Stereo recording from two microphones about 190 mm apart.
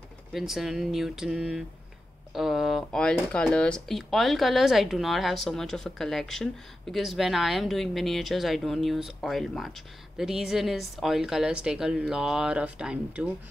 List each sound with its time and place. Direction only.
0.3 s speech: centre (ahead or behind)